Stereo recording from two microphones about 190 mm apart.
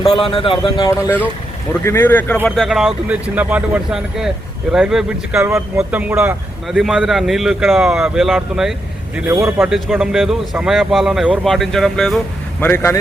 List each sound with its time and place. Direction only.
0.0 s speech: 25° left (ahead or behind)
0.9 s speech: 15° left (ahead or behind); by 8.7 s centre (ahead or behind)
9.1 s a man's voice: 15° right (ahead or behind)
9.6 s speech: centre (ahead or behind)